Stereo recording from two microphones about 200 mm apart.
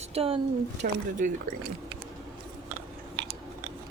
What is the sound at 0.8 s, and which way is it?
Speech, 45° right (ahead or behind).